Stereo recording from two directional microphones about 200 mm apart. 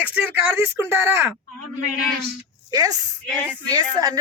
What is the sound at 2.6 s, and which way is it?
A woman's voice, 20° right (ahead or behind).